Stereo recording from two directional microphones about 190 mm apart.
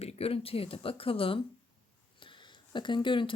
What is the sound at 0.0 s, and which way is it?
Speech, 30° left (ahead or behind).